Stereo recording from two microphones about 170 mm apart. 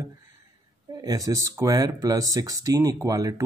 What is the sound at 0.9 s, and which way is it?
A man's voice, 20° right (ahead or behind).